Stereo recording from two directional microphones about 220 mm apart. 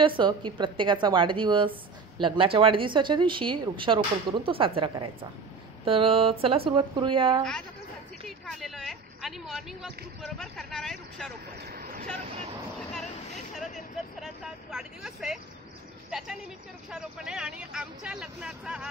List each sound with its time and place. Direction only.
0.0 s speech: 20° right (ahead or behind)
8.3 s speech: centre (ahead or behind)
11.5 s speech: 45° right (ahead or behind)
14.2 s speech: centre (ahead or behind)